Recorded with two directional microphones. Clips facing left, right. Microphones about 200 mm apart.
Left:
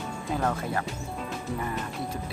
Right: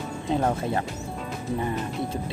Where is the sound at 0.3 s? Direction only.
25° right (ahead or behind).